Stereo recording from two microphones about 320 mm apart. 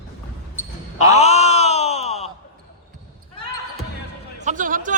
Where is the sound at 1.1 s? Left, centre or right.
Centre.